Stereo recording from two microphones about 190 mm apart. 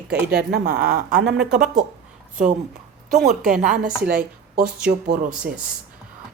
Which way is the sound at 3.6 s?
45° right (ahead or behind).